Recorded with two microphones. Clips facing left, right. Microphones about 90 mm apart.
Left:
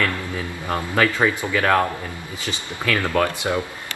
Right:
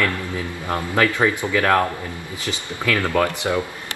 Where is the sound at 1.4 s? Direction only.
15° right (ahead or behind).